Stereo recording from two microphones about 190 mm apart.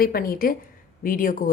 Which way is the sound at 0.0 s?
50° left (ahead or behind).